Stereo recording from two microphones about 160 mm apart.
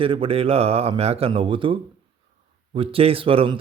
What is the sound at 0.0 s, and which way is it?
A man's voice, 35° right (ahead or behind).